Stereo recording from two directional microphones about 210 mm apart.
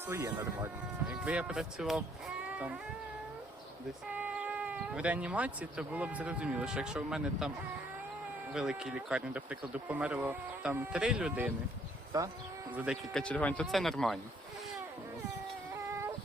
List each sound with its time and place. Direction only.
0.1 s speech: 10° right (ahead or behind)
2.5 s a sound: 5° right (ahead or behind)
4.1 s speech: 5° right (ahead or behind)
8.5 s speech: 5° right (ahead or behind)
12.1 s speech: 15° right (ahead or behind)
12.7 s speech: 5° right (ahead or behind)